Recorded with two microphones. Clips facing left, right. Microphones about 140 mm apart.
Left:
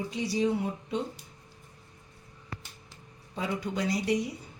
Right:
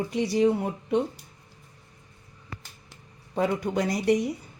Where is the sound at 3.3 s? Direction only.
55° right (ahead or behind).